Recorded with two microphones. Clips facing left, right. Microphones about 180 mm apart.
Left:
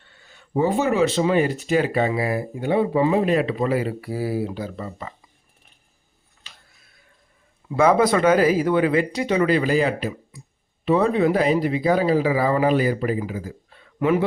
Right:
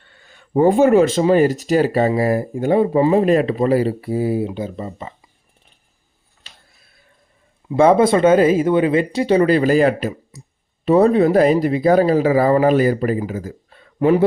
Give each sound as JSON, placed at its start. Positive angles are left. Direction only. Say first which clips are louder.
{"t": 0.0, "sound": "speech", "louder": "right 2 dB", "side_deg": -55}
{"t": 7.7, "sound": "speech", "louder": "right 4 dB", "side_deg": -25}